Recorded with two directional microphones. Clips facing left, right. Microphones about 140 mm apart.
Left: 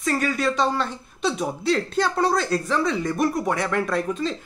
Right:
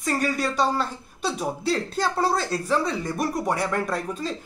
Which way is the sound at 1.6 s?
35° right (ahead or behind).